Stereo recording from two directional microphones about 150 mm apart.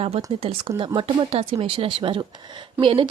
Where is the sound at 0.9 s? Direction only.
35° right (ahead or behind).